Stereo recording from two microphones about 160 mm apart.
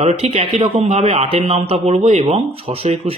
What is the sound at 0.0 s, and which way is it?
A man's voice, 40° right (ahead or behind).